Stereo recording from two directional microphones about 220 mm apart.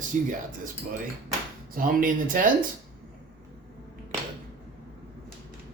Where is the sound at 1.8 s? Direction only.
40° right (ahead or behind).